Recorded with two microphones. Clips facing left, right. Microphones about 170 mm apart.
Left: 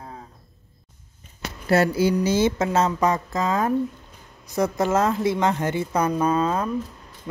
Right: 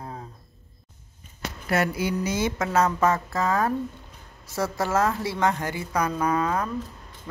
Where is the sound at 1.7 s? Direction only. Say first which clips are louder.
Left 6 dB; 30° left (ahead or behind).